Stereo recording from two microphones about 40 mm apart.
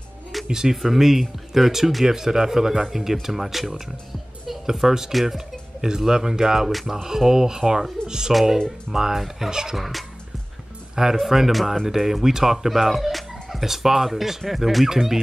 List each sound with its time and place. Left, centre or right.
0.5 s speech: centre
5.8 s speech: centre
6.7 s speech: centre
7.0 s speech: centre
8.3 s speech: centre
9.8 s speech: centre
11.1 s speech: centre